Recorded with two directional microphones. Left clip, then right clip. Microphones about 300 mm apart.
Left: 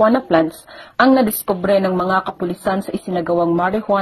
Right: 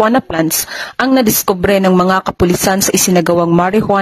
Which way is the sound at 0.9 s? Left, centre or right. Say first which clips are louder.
Right 1 dB; right.